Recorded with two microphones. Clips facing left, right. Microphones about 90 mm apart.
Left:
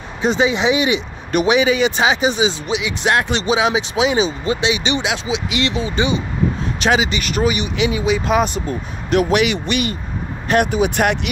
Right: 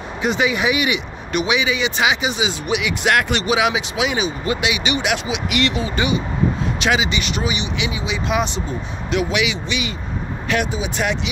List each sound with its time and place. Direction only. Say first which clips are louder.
0.2 s speech: left 3 dB; 30° left (ahead or behind)
1.4 s speech: left 6 dB; 40° left (ahead or behind)
2.7 s speech: even; 25° left (ahead or behind)
6.8 s speech: left 3 dB; 40° left (ahead or behind); by 11.1 s 60° left (ahead or behind)